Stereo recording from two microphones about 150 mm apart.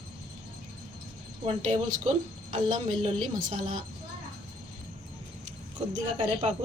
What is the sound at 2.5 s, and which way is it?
A woman's voice, 35° right (ahead or behind).